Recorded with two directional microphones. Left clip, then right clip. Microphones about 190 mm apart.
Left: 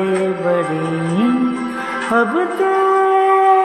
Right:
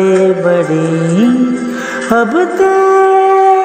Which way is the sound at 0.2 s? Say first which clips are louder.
Right 7 dB; 30° right (ahead or behind).